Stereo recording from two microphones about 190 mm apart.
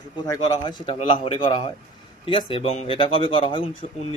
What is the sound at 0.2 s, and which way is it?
Speech, 20° left (ahead or behind).